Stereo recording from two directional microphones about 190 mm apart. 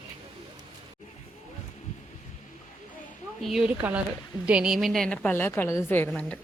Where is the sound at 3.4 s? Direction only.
5° right (ahead or behind).